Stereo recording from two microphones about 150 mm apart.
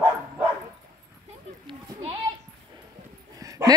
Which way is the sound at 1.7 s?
35° right (ahead or behind).